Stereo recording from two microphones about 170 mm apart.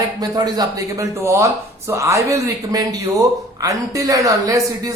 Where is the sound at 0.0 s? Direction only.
20° right (ahead or behind).